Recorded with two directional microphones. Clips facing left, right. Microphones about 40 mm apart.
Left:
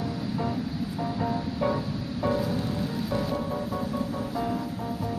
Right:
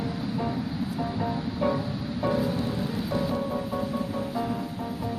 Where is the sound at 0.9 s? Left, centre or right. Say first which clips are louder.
Left 2 dB; centre.